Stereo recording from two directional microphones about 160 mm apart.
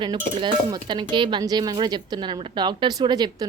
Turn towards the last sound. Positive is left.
turn(degrees=-25)  # may be behind; listen again after turning